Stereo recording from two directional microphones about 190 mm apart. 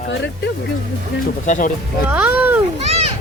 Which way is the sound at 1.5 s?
40° left (ahead or behind).